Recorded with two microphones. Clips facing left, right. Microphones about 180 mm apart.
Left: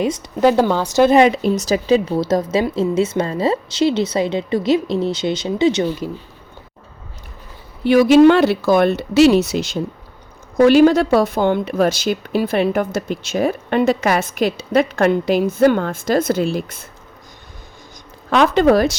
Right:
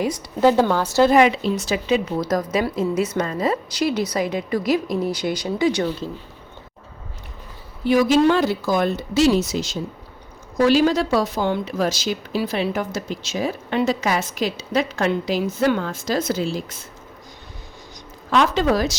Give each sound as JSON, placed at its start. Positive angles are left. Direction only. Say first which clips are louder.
{"t": 0.0, "sound": "a woman's voice", "louder": "left 2 dB", "side_deg": 20}
{"t": 1.2, "sound": "speech", "louder": "left 4 dB", "side_deg": 50}
{"t": 7.9, "sound": "a woman's voice", "louder": "left 6 dB", "side_deg": 65}
{"t": 18.3, "sound": "a woman's voice", "louder": "left 5 dB", "side_deg": 60}